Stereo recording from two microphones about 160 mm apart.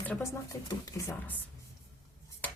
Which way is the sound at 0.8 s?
20° left (ahead or behind).